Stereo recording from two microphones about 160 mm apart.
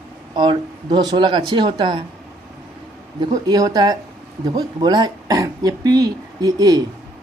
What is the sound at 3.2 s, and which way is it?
Speech, 25° right (ahead or behind).